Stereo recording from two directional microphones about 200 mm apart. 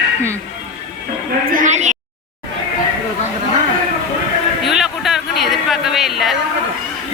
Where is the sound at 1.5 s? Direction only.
40° right (ahead or behind).